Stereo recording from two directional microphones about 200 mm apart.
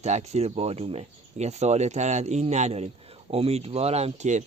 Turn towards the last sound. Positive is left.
turn(degrees=-35)  # may be behind; listen again after turning